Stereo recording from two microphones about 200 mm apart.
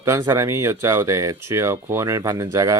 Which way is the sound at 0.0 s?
15° right (ahead or behind).